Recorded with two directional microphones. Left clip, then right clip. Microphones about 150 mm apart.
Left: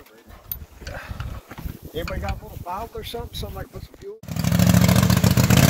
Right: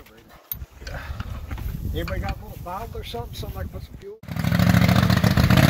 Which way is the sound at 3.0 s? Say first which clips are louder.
Left 3 dB; 65° left (ahead or behind).